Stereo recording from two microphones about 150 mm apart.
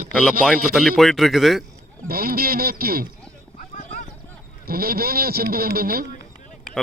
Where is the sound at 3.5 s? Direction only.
60° left (ahead or behind).